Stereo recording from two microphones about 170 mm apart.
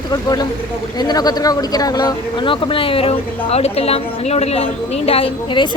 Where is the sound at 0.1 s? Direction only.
20° left (ahead or behind).